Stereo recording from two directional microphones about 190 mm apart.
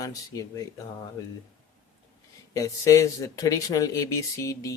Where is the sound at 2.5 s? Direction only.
15° left (ahead or behind).